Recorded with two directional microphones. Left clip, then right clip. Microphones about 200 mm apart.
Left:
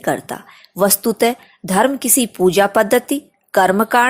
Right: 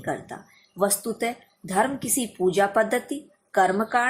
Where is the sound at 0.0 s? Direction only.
40° left (ahead or behind).